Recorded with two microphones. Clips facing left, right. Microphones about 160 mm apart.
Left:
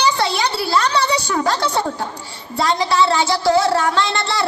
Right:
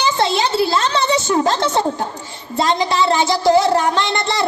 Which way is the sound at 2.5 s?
20° right (ahead or behind).